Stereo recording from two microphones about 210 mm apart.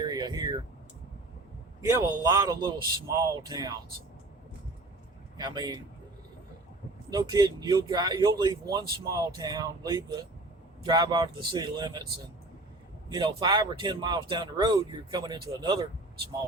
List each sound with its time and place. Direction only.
0.0 s air conditioning: 20° right (ahead or behind)
1.8 s speech: 15° right (ahead or behind)
5.4 s speech: 20° right (ahead or behind)
7.1 s speech: 20° right (ahead or behind)
13.1 s speech: 20° right (ahead or behind)